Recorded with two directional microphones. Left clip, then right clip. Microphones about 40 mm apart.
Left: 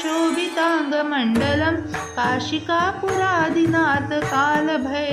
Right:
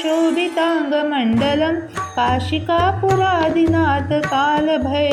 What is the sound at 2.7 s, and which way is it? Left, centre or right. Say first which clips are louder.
Speech: right 5 dB; right.